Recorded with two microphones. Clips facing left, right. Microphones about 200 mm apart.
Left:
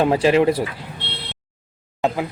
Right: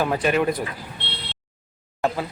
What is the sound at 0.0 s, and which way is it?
Speech, 25° left (ahead or behind).